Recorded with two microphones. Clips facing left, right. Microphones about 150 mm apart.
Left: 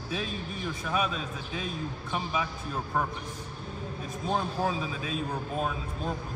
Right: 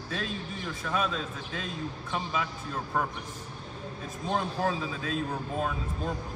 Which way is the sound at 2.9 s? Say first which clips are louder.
Even; 5° left (ahead or behind).